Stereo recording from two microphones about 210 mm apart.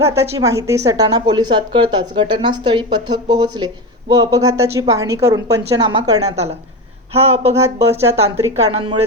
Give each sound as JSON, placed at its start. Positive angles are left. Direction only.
{"t": 0.1, "sound": "a woman's voice", "side_deg": -15}
{"t": 6.3, "sound": "a woman's voice", "side_deg": -30}
{"t": 7.5, "sound": "a woman's voice", "side_deg": -15}
{"t": 8.5, "sound": "speech", "side_deg": -30}